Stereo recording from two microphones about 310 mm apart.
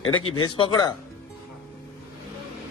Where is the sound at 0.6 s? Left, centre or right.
Centre.